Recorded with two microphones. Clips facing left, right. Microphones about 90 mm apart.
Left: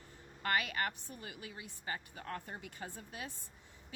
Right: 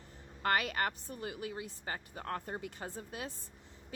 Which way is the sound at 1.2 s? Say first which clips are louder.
Right 9 dB; 30° right (ahead or behind).